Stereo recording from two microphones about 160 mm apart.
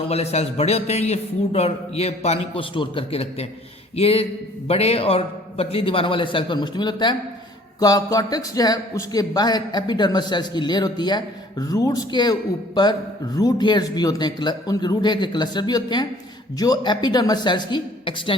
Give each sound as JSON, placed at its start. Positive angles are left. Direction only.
{"t": 0.1, "sound": "a man's voice", "side_deg": 40}